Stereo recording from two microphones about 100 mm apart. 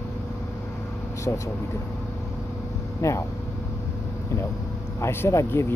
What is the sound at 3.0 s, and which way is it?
Speech, 30° left (ahead or behind).